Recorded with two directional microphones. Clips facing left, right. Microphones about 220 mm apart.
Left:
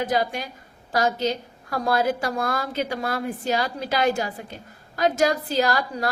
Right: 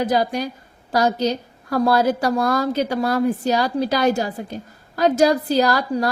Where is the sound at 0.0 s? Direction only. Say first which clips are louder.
Right 4 dB; 40° right (ahead or behind).